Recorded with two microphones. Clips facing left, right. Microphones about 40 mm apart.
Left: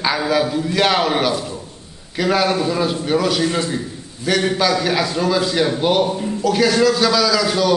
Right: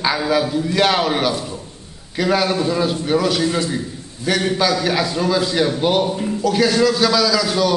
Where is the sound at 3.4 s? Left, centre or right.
Left.